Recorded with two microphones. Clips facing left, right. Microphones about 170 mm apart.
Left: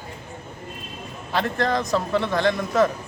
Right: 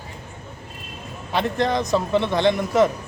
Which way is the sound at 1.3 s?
20° right (ahead or behind).